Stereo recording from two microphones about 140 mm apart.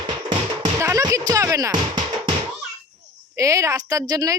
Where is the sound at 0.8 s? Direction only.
20° right (ahead or behind).